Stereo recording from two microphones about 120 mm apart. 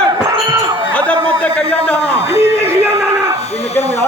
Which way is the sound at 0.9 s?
10° left (ahead or behind).